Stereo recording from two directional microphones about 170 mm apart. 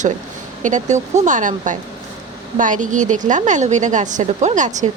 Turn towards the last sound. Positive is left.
turn(degrees=-45)  # may be behind; listen again after turning